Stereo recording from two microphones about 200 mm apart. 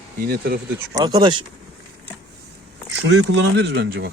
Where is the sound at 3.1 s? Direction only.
65° right (ahead or behind).